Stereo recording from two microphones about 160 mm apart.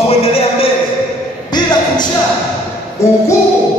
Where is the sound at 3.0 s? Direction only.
20° left (ahead or behind).